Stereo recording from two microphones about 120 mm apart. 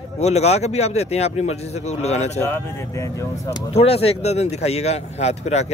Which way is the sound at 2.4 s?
15° left (ahead or behind).